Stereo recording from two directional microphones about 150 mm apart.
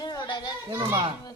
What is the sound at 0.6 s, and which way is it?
Speech, 25° right (ahead or behind).